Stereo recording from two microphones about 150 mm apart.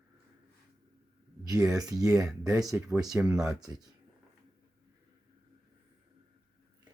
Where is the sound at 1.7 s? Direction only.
25° right (ahead or behind).